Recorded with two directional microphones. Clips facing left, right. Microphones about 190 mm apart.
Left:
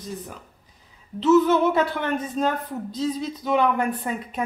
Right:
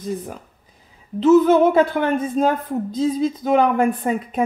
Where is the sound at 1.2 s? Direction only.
50° right (ahead or behind).